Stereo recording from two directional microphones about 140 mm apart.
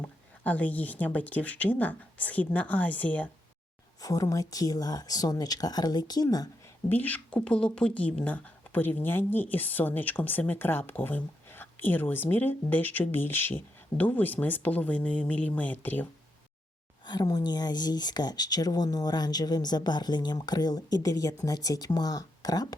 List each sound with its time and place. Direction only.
0.0 s a woman's voice: 10° left (ahead or behind)
4.0 s speech: 25° left (ahead or behind)
6.8 s a woman's voice: 15° left (ahead or behind)
17.1 s speech: 30° left (ahead or behind)